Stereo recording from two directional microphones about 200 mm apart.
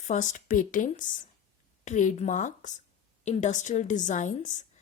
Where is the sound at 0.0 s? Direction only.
40° left (ahead or behind).